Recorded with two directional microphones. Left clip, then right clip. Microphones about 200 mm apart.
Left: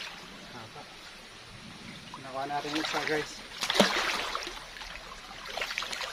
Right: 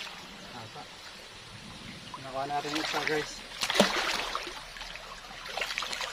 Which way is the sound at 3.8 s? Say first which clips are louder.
Left 1 dB; 20° left (ahead or behind).